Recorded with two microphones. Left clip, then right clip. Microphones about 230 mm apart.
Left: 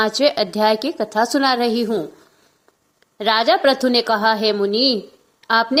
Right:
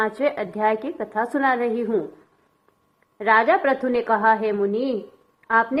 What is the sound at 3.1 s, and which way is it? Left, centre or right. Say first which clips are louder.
A woman's voice: left 1 dB; left.